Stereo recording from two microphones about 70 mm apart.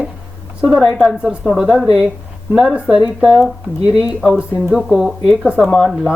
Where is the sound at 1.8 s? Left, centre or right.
Centre.